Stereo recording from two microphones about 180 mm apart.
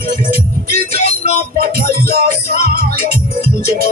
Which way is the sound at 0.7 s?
55° right (ahead or behind).